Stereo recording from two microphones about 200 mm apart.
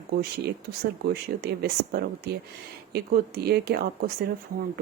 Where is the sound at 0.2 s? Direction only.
50° right (ahead or behind).